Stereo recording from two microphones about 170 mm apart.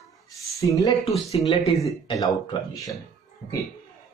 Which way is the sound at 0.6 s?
20° left (ahead or behind).